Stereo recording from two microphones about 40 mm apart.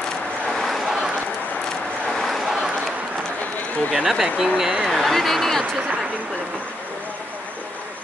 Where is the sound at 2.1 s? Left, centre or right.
Centre.